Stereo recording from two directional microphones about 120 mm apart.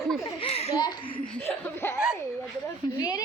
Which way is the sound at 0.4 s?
55° left (ahead or behind).